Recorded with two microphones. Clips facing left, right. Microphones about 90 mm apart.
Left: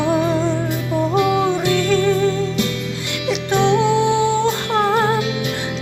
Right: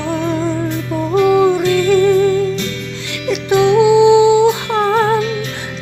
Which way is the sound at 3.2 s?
5° right (ahead or behind).